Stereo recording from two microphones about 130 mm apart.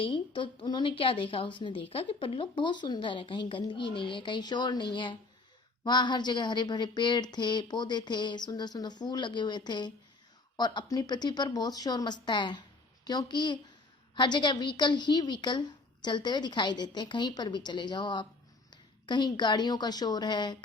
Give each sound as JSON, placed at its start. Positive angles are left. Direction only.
{"t": 0.0, "sound": "a woman's voice", "side_deg": 40}